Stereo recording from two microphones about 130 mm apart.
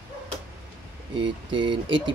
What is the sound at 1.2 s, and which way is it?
Speech, 40° right (ahead or behind).